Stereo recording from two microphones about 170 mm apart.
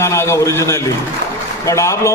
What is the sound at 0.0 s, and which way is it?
A man's voice, 15° left (ahead or behind).